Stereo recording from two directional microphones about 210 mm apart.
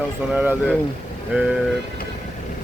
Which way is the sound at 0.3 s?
5° right (ahead or behind).